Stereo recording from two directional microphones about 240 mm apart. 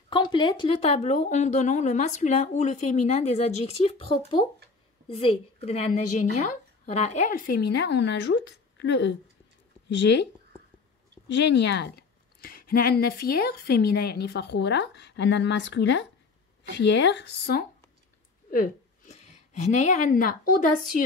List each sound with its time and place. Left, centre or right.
0.1 s a woman's voice: centre; by 10.2 s left
11.2 s a woman's voice: left
18.5 s a sound: left
19.5 s a woman's voice: left